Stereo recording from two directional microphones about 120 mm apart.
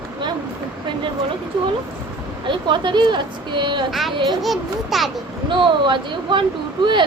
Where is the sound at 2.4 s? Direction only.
40° right (ahead or behind).